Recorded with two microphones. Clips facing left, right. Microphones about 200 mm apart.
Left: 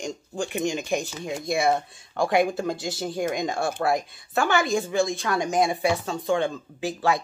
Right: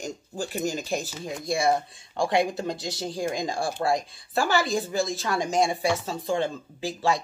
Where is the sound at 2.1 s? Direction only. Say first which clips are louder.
Left 2 dB; 25° right (ahead or behind).